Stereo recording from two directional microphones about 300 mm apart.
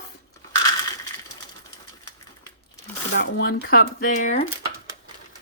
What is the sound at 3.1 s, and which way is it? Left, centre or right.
Speech, left.